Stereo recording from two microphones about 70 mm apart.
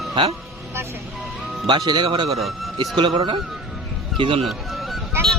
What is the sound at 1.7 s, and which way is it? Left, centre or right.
Speech, right.